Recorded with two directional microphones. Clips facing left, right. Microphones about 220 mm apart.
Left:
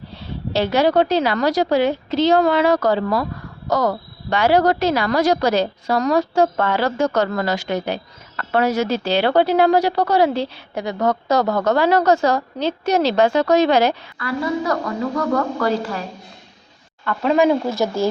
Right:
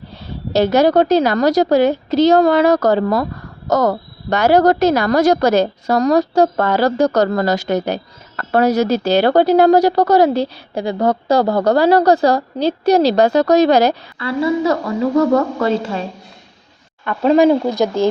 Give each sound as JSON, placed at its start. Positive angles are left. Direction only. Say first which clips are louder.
{"t": 0.5, "sound": "a woman's voice", "louder": "right 4 dB", "side_deg": -40}
{"t": 14.2, "sound": "a woman's voice", "louder": "right 6 dB", "side_deg": -25}
{"t": 17.2, "sound": "a woman's voice", "louder": "right 5 dB", "side_deg": -35}
{"t": 17.7, "sound": "speech", "louder": "right 4 dB", "side_deg": -15}